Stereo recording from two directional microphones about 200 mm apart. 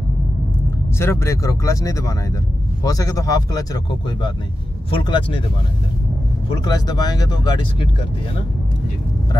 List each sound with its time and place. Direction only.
0.9 s speech: 15° left (ahead or behind)
6.6 s speech: 20° left (ahead or behind)